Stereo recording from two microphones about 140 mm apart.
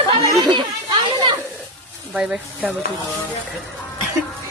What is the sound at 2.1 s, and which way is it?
Speech, 10° right (ahead or behind).